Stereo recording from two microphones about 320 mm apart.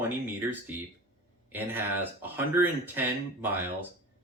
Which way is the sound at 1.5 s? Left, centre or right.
Centre.